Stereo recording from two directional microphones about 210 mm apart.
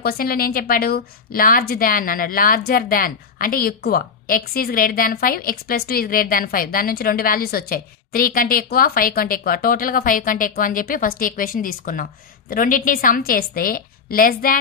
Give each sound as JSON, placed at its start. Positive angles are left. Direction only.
{"t": 0.0, "sound": "a woman's voice", "side_deg": 45}